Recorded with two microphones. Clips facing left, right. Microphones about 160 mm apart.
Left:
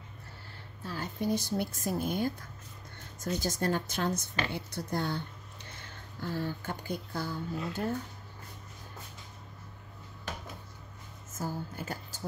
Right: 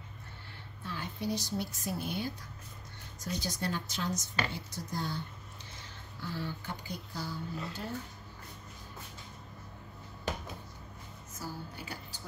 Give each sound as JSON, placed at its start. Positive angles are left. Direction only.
{"t": 0.8, "sound": "a woman's voice", "side_deg": 40}
{"t": 5.8, "sound": "speech", "side_deg": 45}
{"t": 11.3, "sound": "a woman's voice", "side_deg": 45}